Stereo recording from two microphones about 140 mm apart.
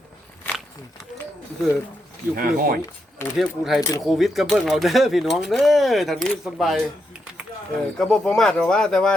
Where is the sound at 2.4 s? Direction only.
90° right.